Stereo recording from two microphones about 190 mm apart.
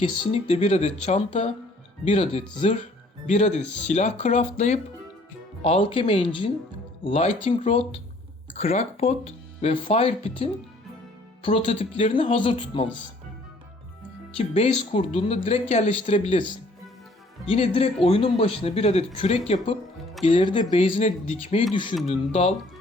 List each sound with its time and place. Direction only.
0.0 s speech: 30° left (ahead or behind)
14.3 s speech: 35° left (ahead or behind)
17.5 s speech: 30° left (ahead or behind)